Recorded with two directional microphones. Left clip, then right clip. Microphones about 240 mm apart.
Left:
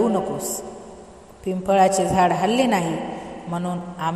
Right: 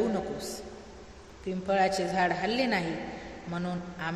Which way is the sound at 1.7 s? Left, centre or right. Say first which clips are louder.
Left 9 dB; left.